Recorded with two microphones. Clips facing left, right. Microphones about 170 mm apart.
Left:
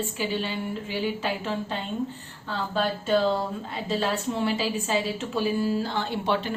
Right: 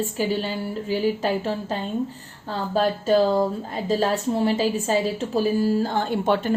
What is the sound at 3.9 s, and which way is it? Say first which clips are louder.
A woman's voice: right 5 dB; 40° right (ahead or behind).